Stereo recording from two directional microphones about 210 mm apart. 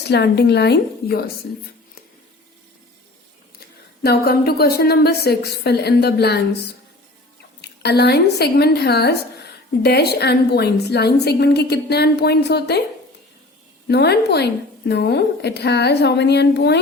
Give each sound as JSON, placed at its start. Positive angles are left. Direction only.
{"t": 0.1, "sound": "a woman's voice", "side_deg": 55}
{"t": 4.0, "sound": "a woman's voice", "side_deg": 50}
{"t": 7.6, "sound": "a woman's voice", "side_deg": 50}
{"t": 13.8, "sound": "a woman's voice", "side_deg": 50}